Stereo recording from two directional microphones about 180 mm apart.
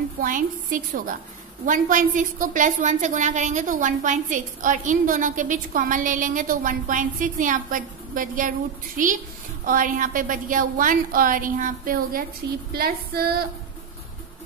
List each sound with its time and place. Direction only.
0.2 s a woman's voice: 50° right (ahead or behind)